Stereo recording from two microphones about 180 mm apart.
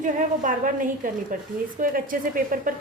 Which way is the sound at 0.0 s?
45° right (ahead or behind).